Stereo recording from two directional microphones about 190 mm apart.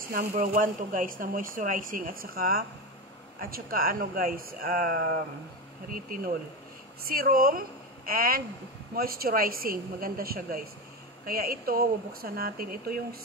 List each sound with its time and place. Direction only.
0.0 s a woman's voice: 50° right (ahead or behind)